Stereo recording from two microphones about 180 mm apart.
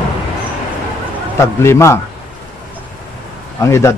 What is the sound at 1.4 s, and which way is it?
Speech, 15° left (ahead or behind).